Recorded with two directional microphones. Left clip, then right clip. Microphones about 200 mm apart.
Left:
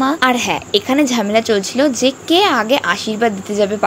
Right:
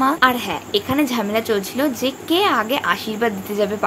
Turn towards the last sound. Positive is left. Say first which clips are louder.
# left 4 dB
turn(degrees=20)  # may be behind; listen again after turning